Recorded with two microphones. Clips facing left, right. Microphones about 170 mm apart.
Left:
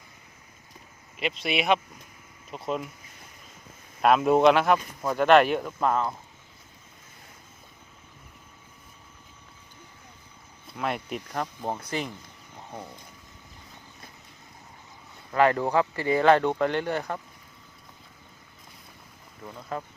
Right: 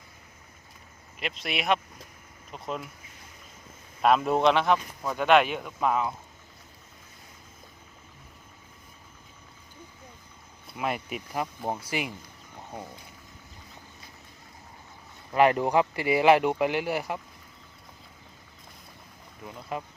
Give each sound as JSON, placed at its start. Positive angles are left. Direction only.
{"t": 1.2, "sound": "speech", "side_deg": 0}
{"t": 4.0, "sound": "speech", "side_deg": 0}
{"t": 10.8, "sound": "speech", "side_deg": -5}
{"t": 15.3, "sound": "speech", "side_deg": -15}
{"t": 19.7, "sound": "speech", "side_deg": -15}